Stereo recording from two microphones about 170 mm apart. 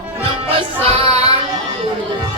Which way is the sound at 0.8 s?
35° right (ahead or behind).